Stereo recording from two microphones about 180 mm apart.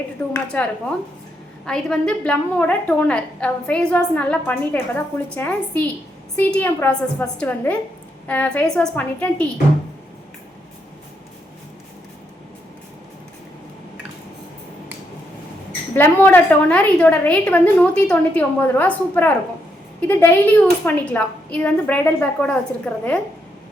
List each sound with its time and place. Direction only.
0.2 s a woman's voice: 10° left (ahead or behind)
1.6 s a woman's voice: 5° left (ahead or behind)
16.0 s a woman's voice: 10° left (ahead or behind)